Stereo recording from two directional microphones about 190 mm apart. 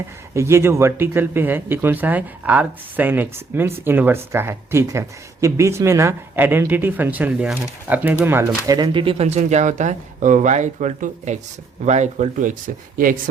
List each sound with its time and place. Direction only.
0.3 s speech: 15° right (ahead or behind); by 13.1 s 45° right (ahead or behind)